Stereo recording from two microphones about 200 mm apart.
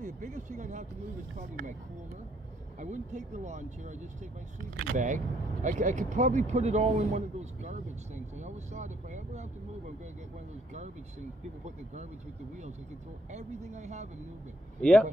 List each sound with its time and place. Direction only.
0.0 s speech: 40° right (ahead or behind)
2.8 s speech: 35° right (ahead or behind)
10.7 s speech: 35° right (ahead or behind)
13.3 s speech: 35° right (ahead or behind)
14.8 s speech: 5° left (ahead or behind)